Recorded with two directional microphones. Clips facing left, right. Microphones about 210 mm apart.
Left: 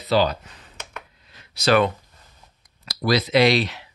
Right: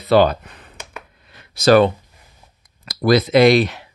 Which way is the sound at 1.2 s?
55° right (ahead or behind).